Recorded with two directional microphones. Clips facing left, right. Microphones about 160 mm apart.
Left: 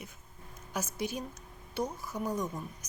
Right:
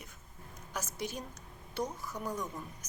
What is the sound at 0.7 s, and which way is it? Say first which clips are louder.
Speech: left 4 dB; 5° left (ahead or behind).